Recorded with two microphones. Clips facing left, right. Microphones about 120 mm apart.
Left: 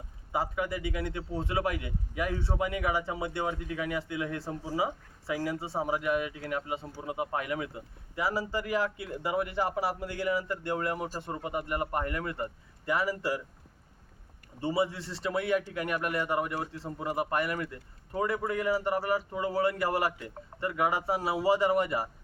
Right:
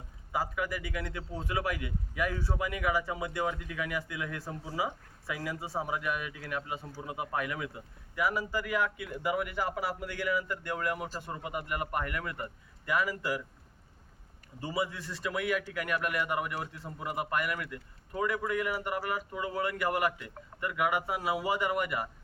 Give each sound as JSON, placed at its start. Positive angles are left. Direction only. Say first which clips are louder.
{"t": 0.3, "sound": "speech", "louder": "left 2 dB", "side_deg": 25}
{"t": 14.6, "sound": "speech", "louder": "left 4 dB", "side_deg": 30}